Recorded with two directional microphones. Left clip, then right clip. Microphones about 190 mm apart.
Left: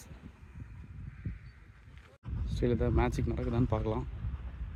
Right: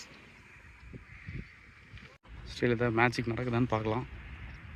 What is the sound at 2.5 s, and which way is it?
Speech, 5° left (ahead or behind).